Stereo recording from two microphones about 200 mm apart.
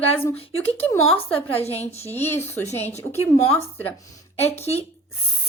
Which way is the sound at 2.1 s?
10° left (ahead or behind).